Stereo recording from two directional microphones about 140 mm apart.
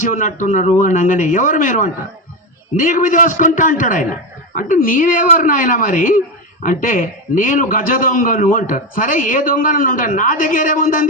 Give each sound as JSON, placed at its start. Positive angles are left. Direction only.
{"t": 0.0, "sound": "a man's voice", "side_deg": 65}